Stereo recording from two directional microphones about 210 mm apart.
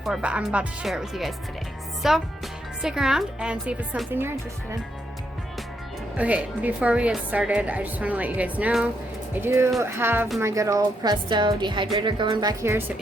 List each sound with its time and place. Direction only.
0.0 s a woman's voice: 5° right (ahead or behind)
6.1 s a woman's voice: 5° right (ahead or behind)